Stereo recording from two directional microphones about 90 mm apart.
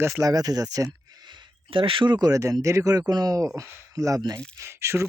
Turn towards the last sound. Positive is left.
turn(degrees=-30)  # may be behind; listen again after turning